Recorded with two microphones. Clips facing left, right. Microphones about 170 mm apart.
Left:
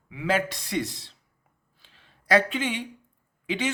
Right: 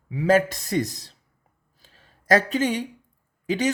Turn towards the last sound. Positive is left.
turn(degrees=-40)  # may be behind; listen again after turning